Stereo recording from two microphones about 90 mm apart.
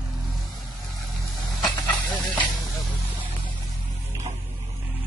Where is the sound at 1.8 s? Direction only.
15° left (ahead or behind).